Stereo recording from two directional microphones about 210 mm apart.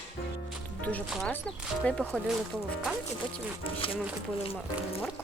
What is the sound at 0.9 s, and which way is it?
Speech, 5° left (ahead or behind).